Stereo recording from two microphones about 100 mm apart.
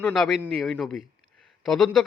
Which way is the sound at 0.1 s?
Centre (ahead or behind).